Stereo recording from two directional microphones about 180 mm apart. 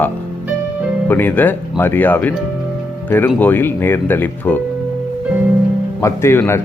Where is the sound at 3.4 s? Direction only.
10° left (ahead or behind).